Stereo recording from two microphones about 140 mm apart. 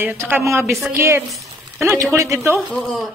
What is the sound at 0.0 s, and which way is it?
A woman's voice, 15° right (ahead or behind).